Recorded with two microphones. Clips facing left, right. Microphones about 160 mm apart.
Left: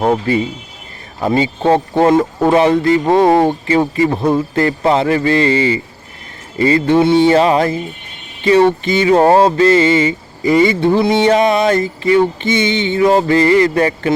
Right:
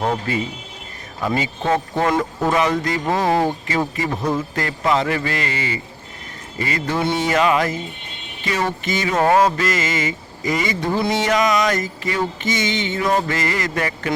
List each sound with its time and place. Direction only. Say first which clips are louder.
0.0 s a man's voice: left 7 dB; 30° left (ahead or behind)